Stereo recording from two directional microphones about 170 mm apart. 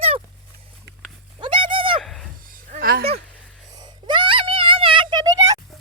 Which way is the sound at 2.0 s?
Centre (ahead or behind).